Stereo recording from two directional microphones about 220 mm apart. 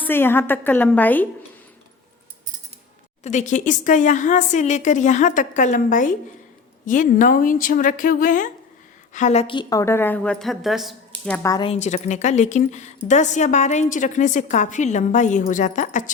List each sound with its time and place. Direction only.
0.0 s a woman's voice: 10° left (ahead or behind)
3.2 s a woman's voice: 35° left (ahead or behind); by 11.3 s centre (ahead or behind)
11.4 s a woman's voice: 20° left (ahead or behind); by 16.1 s 35° left (ahead or behind)